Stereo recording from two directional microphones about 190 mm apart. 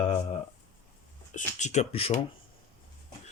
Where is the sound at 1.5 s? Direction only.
35° left (ahead or behind).